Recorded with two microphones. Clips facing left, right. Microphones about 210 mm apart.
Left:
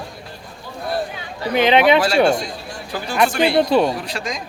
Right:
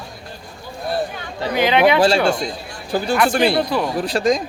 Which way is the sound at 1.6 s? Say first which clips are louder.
Left 2 dB; 25° left (ahead or behind).